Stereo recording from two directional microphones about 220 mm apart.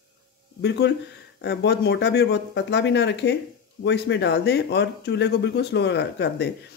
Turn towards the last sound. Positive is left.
turn(degrees=50)  # may be behind; listen again after turning